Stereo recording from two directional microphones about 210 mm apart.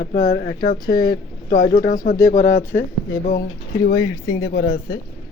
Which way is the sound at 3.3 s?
45° left (ahead or behind).